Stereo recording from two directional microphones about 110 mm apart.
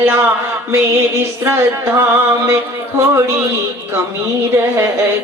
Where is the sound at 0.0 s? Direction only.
20° right (ahead or behind).